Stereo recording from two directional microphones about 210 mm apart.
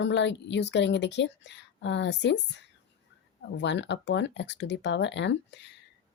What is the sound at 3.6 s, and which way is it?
A woman's voice, 55° left (ahead or behind).